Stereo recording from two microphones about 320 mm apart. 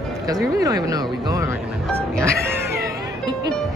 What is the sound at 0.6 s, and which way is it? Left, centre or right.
Speech, centre.